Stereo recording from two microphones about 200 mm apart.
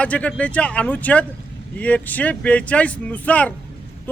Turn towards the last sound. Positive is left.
turn(degrees=5)  # may be behind; listen again after turning